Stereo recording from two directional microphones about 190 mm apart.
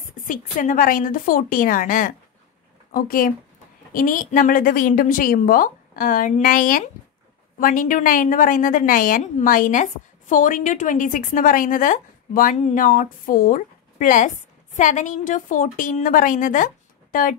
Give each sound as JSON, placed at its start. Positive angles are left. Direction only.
{"t": 0.0, "sound": "a woman's voice", "side_deg": 45}